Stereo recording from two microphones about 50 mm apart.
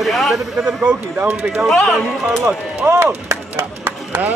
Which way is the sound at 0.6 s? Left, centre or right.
Right.